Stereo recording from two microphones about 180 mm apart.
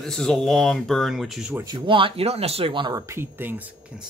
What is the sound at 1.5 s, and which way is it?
Speech, 25° right (ahead or behind).